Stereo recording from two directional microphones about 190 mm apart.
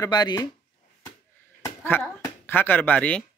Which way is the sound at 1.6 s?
10° left (ahead or behind).